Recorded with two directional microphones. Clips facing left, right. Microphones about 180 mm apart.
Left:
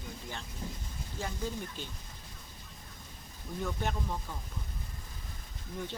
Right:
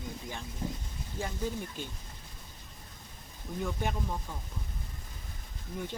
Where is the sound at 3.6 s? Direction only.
10° right (ahead or behind).